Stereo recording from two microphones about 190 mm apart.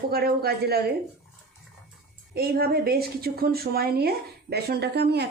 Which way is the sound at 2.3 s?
55° right (ahead or behind).